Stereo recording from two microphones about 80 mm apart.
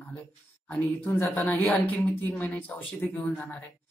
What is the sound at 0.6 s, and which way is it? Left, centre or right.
Speech, left.